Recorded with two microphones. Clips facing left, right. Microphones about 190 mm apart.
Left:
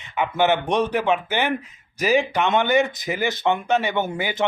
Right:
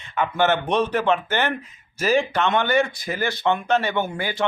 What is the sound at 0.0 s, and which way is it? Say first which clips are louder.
A man's voice: even; 15° left (ahead or behind).